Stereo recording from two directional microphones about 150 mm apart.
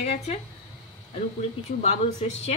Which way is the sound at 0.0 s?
45° left (ahead or behind).